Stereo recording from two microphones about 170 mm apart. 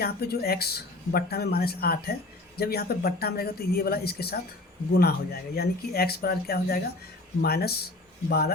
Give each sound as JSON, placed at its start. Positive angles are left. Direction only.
{"t": 0.0, "sound": "speech", "side_deg": 65}